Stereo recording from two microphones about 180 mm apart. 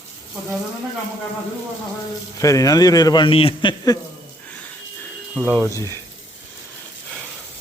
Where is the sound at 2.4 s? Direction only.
20° left (ahead or behind).